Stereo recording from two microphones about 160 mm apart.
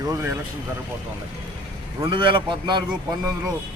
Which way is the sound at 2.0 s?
30° right (ahead or behind).